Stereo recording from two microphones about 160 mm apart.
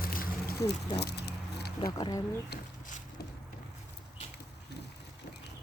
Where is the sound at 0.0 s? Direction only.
65° left (ahead or behind).